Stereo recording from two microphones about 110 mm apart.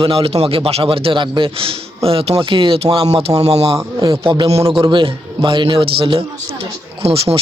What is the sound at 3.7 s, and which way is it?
A man's voice, 35° right (ahead or behind).